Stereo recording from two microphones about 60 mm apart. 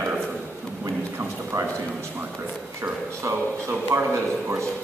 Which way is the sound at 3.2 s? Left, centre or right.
Right.